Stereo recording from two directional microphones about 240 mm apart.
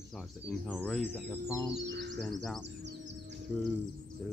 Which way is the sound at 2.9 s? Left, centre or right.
Right.